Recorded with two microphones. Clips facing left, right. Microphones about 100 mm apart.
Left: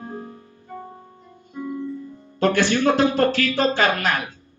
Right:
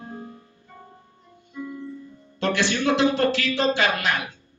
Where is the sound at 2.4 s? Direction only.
45° left (ahead or behind).